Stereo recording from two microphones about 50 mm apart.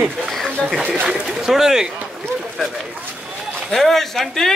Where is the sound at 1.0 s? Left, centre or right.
Centre.